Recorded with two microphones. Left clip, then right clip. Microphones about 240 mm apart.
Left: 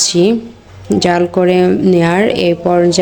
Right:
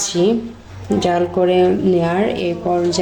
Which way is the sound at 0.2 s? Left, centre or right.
Left.